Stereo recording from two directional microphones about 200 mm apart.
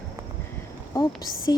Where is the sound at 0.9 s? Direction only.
15° left (ahead or behind).